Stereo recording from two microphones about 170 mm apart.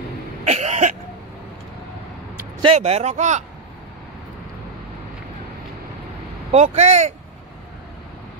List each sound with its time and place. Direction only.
0.5 s cough: 40° right (ahead or behind)
2.6 s a man's voice: 40° right (ahead or behind)
6.5 s a man's voice: 40° right (ahead or behind)